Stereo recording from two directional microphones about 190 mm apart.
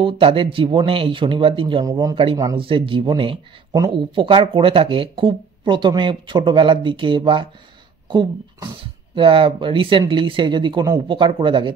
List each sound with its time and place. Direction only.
0.0 s speech: 30° right (ahead or behind)